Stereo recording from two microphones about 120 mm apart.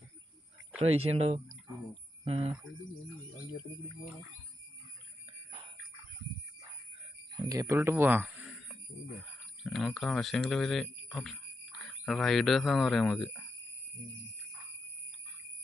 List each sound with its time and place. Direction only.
0.8 s speech: 55° right (ahead or behind)
7.4 s speech: 30° right (ahead or behind)
8.4 s a sound: 5° right (ahead or behind)
9.6 s speech: centre (ahead or behind)